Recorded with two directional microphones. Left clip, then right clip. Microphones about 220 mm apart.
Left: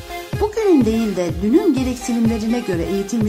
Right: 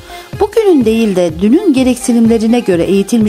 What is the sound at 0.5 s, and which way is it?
A woman's voice, 40° right (ahead or behind).